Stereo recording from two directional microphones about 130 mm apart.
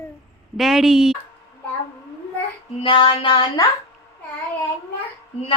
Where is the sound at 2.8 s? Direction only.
40° left (ahead or behind).